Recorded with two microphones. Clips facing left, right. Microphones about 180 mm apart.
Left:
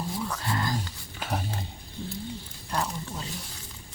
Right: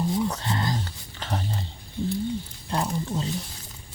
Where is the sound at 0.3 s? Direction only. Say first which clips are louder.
Right 2 dB; 25° right (ahead or behind).